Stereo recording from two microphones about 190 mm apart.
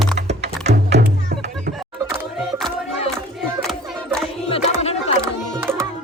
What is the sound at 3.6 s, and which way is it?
Battle cry, 5° left (ahead or behind).